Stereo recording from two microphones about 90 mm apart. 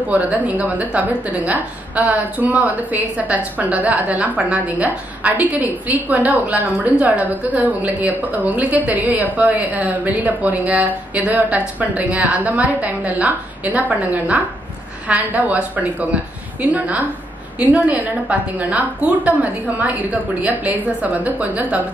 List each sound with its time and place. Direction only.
0.1 s a woman's voice: 15° right (ahead or behind)